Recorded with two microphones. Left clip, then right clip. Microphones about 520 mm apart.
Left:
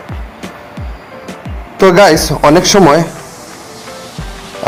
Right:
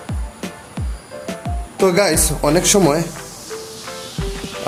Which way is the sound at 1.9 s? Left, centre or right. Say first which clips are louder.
Left 12 dB; right.